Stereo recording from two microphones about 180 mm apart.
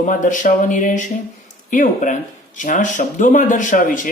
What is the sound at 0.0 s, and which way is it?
Speech, 45° left (ahead or behind).